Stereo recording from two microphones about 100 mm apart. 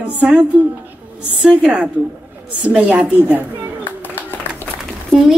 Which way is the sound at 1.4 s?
10° right (ahead or behind).